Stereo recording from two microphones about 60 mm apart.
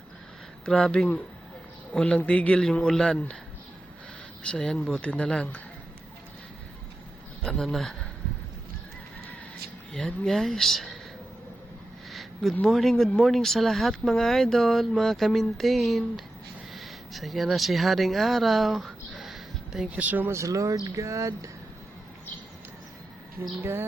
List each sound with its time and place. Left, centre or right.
0.6 s a man's voice: centre
4.4 s a man's voice: centre
4.9 s speech: left
7.6 s speech: centre
10.2 s speech: centre
12.1 s a sound: centre
12.6 s speech: centre
16.7 s a sound: centre
19.9 s speech: right
20.3 s a sound: right
23.6 s speech: right